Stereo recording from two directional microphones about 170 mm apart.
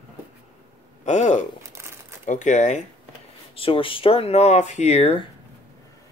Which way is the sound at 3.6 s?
30° left (ahead or behind).